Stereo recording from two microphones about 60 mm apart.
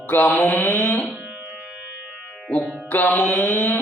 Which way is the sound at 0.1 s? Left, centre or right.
Left.